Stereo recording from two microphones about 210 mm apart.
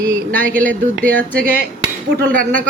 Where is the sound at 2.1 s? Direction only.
40° right (ahead or behind).